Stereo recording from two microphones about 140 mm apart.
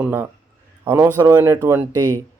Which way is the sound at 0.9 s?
20° right (ahead or behind).